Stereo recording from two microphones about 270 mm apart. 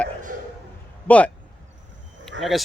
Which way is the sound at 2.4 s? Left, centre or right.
Centre.